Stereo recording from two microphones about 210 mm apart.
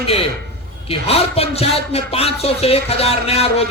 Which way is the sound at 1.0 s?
30° left (ahead or behind).